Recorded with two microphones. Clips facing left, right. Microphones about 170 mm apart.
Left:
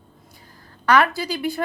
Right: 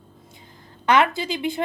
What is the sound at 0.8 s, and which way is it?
Speech, 20° right (ahead or behind).